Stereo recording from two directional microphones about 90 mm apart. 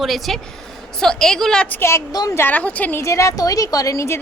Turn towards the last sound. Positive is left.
turn(degrees=35)  # may be behind; listen again after turning